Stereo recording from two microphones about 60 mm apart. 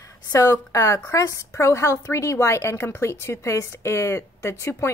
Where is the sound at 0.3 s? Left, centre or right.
Left.